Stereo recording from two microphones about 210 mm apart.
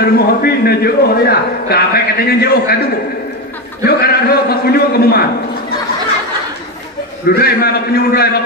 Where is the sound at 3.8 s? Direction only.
45° left (ahead or behind).